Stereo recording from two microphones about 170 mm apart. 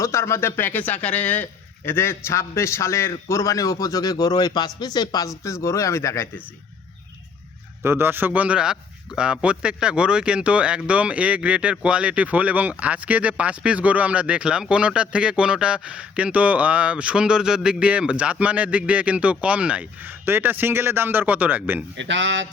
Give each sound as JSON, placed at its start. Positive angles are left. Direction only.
{"t": 0.0, "sound": "speech", "side_deg": 15}
{"t": 7.8, "sound": "a man's voice", "side_deg": -15}
{"t": 21.9, "sound": "speech", "side_deg": -90}